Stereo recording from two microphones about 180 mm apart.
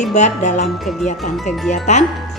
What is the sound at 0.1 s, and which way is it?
Speech, 40° left (ahead or behind).